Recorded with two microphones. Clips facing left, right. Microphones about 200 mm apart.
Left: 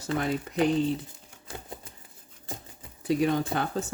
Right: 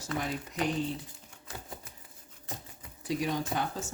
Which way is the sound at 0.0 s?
60° left (ahead or behind).